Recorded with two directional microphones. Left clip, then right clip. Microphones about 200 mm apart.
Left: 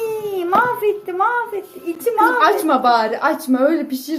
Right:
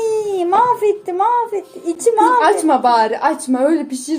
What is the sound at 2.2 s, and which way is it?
A woman's voice, 15° right (ahead or behind).